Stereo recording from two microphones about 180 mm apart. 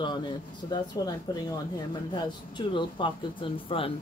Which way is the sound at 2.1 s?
25° left (ahead or behind).